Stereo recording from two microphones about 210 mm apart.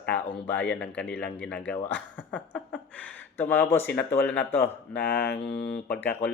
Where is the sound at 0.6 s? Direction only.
5° left (ahead or behind).